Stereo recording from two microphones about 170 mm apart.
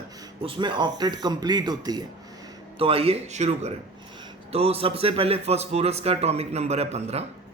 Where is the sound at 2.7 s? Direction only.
35° right (ahead or behind).